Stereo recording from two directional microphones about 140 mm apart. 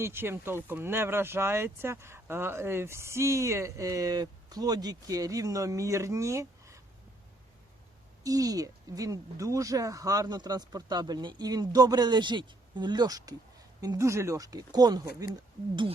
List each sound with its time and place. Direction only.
0.0 s speech: 15° right (ahead or behind)
8.2 s speech: 25° right (ahead or behind)